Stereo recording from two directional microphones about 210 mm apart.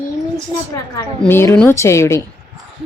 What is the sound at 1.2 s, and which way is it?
Speech, 10° left (ahead or behind).